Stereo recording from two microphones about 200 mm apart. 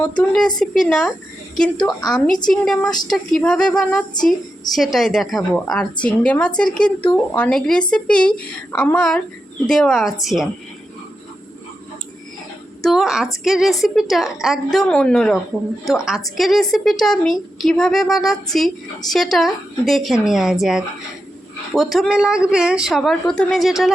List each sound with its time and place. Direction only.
0.0 s speech: 5° left (ahead or behind)
1.7 s a woman's voice: 25° left (ahead or behind)
2.0 s speech: 5° left (ahead or behind)
12.8 s a woman's voice: centre (ahead or behind)